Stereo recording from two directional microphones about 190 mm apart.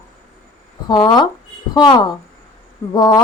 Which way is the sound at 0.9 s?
25° left (ahead or behind).